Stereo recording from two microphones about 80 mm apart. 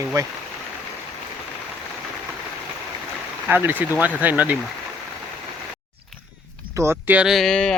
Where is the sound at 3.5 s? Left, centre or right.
Right.